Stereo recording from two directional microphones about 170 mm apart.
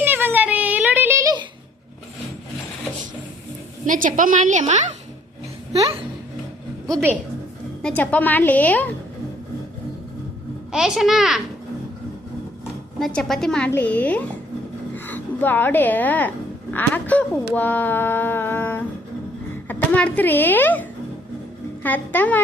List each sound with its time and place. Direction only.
0.0 s a sound: 10° right (ahead or behind)
3.8 s a woman's voice: 50° right (ahead or behind)
7.8 s a woman's voice: 5° left (ahead or behind)
10.7 s a woman's voice: 5° right (ahead or behind)
13.0 s a woman's voice: centre (ahead or behind)
17.5 s a sound: 10° left (ahead or behind)
19.6 s a child's voice: 10° left (ahead or behind)
21.8 s a woman's voice: 10° left (ahead or behind)